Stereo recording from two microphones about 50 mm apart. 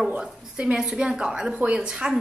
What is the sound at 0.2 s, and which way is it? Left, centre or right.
A woman's voice, right.